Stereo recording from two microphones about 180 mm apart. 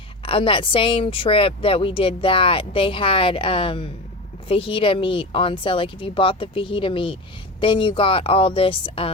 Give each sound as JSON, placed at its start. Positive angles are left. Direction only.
{"t": 0.3, "sound": "speech", "side_deg": 30}